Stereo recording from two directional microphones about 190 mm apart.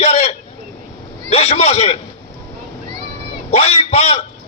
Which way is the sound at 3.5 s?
35° left (ahead or behind).